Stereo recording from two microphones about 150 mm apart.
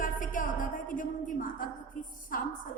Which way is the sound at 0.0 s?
65° left (ahead or behind).